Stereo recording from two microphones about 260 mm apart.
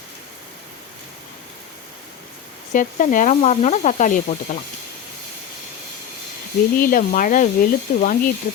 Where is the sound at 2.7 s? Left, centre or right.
Left.